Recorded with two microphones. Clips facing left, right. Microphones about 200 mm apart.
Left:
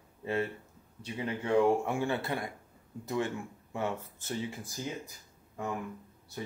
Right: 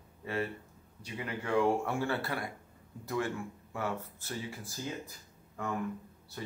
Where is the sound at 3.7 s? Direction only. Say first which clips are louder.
Left 2 dB; 20° left (ahead or behind).